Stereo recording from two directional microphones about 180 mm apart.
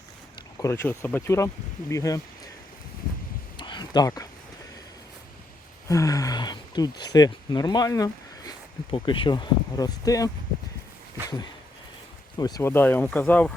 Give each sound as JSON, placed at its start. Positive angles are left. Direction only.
{"t": 0.6, "sound": "speech", "side_deg": 15}
{"t": 3.6, "sound": "a sound", "side_deg": 25}
{"t": 5.9, "sound": "speech", "side_deg": 20}
{"t": 12.4, "sound": "speech", "side_deg": 20}